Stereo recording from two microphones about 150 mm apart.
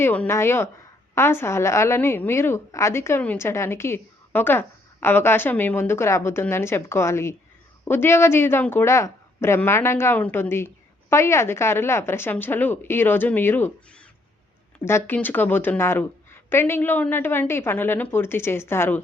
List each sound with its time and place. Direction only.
0.0 s a woman's voice: 15° left (ahead or behind)
14.8 s a woman's voice: 15° left (ahead or behind)